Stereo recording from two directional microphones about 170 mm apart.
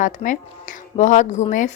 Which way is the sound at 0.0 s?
50° left (ahead or behind).